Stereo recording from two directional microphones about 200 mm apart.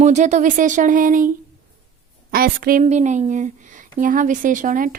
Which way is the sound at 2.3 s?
45° right (ahead or behind).